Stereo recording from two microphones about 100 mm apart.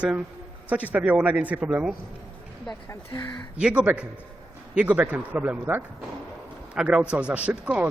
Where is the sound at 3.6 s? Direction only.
10° right (ahead or behind).